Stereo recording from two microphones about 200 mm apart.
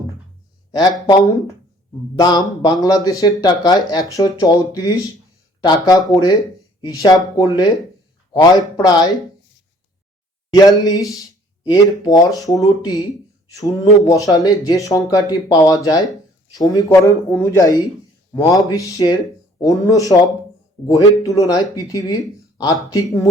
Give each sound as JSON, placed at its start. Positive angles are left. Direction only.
{"t": 0.7, "sound": "speech", "side_deg": 20}
{"t": 10.5, "sound": "speech", "side_deg": 20}